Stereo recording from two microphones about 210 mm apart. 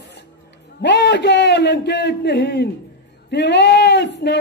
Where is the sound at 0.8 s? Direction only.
55° left (ahead or behind).